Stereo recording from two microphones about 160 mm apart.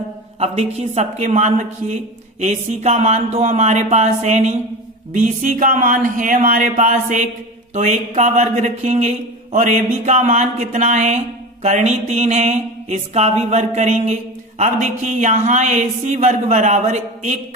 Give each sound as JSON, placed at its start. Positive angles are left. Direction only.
{"t": 0.4, "sound": "speech", "side_deg": -40}